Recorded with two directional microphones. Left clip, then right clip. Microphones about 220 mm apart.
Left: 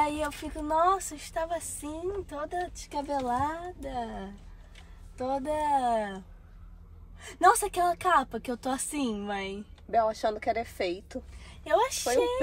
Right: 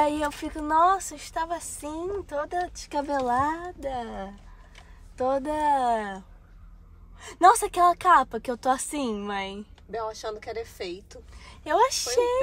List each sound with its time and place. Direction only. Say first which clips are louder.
0.0 s a woman's voice: right 4 dB; centre (ahead or behind)
10.8 s a woman's voice: left 4 dB; 30° left (ahead or behind)
11.4 s a woman's voice: right 4 dB; centre (ahead or behind)